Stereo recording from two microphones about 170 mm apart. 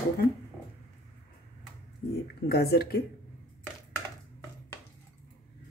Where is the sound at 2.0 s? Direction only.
55° left (ahead or behind).